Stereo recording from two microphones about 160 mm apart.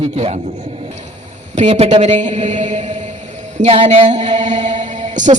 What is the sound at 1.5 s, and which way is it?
Speech, 40° right (ahead or behind).